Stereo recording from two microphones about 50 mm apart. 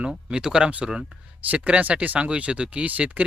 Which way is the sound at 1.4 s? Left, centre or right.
Right.